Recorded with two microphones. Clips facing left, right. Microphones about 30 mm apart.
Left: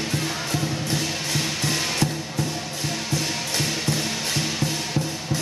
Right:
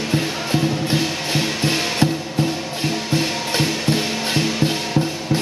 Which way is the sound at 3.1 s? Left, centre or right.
Right.